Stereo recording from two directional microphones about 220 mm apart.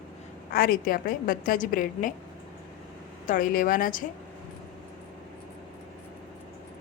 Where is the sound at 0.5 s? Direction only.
40° left (ahead or behind).